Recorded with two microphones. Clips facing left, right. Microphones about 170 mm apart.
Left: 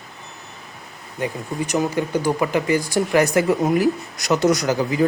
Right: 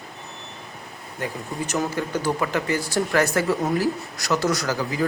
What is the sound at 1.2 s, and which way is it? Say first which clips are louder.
Speech: left 4 dB; 15° left (ahead or behind).